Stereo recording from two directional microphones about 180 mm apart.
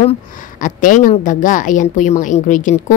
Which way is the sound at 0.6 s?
45° left (ahead or behind).